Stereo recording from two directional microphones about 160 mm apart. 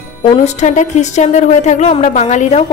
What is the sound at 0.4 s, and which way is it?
A woman's voice, 45° left (ahead or behind).